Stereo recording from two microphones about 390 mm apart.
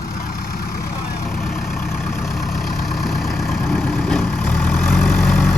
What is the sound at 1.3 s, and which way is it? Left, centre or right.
Vehicle, centre.